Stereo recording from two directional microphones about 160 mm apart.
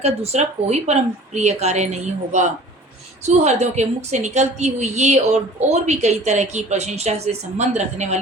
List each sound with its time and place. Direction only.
0.0 s a woman's voice: 40° right (ahead or behind)